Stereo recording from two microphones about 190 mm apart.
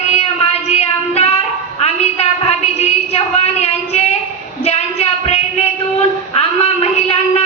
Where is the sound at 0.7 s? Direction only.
35° left (ahead or behind).